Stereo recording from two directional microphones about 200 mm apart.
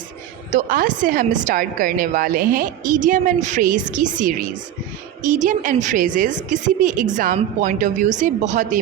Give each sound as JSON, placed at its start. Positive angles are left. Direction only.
{"t": 0.5, "sound": "a woman's voice", "side_deg": -40}